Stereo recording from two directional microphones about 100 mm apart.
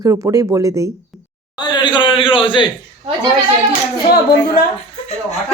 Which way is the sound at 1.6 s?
45° left (ahead or behind).